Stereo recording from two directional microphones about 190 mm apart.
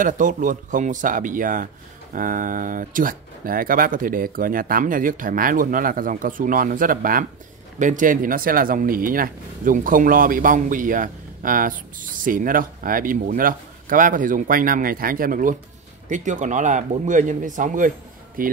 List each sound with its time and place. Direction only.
0.0 s speech: 40° right (ahead or behind)